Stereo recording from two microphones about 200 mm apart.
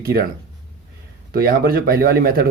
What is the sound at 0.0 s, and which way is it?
Speech, 50° right (ahead or behind).